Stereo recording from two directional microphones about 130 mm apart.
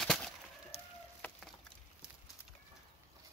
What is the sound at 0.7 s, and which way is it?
Chicken, 50° left (ahead or behind).